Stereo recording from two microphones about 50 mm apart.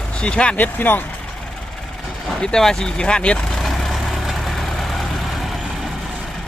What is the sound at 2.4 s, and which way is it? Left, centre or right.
Speech, centre.